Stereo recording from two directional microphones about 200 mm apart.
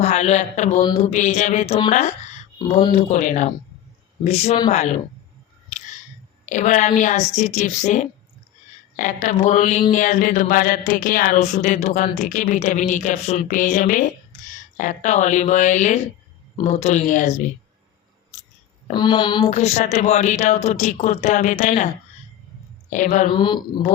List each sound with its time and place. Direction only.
0.0 s speech: 35° left (ahead or behind)
0.8 s speech: 20° left (ahead or behind)
1.1 s speech: 35° left (ahead or behind)
5.7 s a sound: 35° left (ahead or behind)
6.4 s speech: 40° left (ahead or behind)
9.2 s speech: 35° left (ahead or behind)
18.9 s speech: 20° left (ahead or behind); by 21.8 s 40° left (ahead or behind)
22.9 s speech: 40° left (ahead or behind)
23.3 s speech: 25° left (ahead or behind)